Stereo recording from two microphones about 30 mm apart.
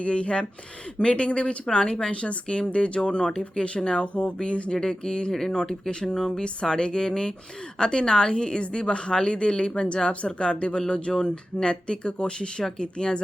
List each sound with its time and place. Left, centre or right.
0.0 s speech: left
2.2 s speech: left
4.7 s a woman's voice: left